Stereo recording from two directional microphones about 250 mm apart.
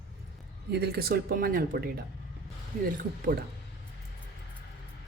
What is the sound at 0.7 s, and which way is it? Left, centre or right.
Speech, right.